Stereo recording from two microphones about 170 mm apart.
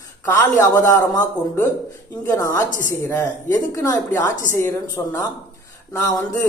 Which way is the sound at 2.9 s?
15° left (ahead or behind).